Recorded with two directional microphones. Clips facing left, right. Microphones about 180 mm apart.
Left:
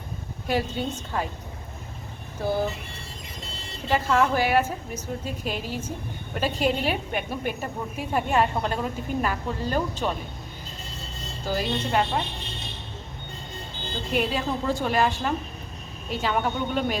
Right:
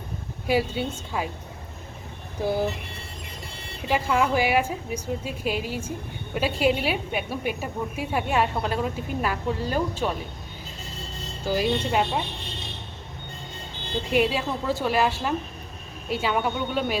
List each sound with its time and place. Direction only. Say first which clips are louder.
0.4 s a woman's voice: right 2 dB; 10° right (ahead or behind)
3.5 s vehicle: even; 60° right (ahead or behind)
3.8 s a woman's voice: left 1 dB; 10° right (ahead or behind)
11.4 s a woman's voice: right 3 dB; 10° right (ahead or behind)
14.1 s a woman's voice: right 2 dB; 10° right (ahead or behind)